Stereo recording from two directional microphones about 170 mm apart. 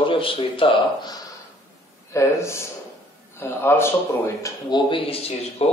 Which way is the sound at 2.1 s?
15° left (ahead or behind).